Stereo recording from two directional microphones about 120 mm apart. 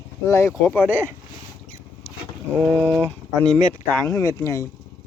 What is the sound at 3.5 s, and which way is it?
Speech, 10° left (ahead or behind).